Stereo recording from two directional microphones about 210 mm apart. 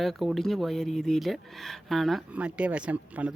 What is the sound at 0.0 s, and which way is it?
Speech, centre (ahead or behind).